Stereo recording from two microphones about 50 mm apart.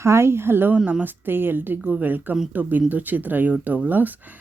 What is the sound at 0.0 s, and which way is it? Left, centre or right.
Speech, right.